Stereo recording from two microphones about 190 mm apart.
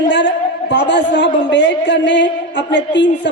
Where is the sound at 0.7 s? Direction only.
65° left (ahead or behind).